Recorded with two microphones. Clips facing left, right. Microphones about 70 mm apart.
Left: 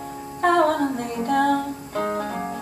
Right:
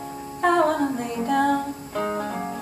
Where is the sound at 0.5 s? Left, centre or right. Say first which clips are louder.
Left 2 dB; right.